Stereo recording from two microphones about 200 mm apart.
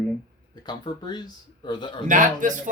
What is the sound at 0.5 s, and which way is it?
Speech, 20° left (ahead or behind).